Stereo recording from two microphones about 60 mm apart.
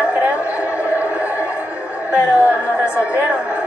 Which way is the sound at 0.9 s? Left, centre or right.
Right.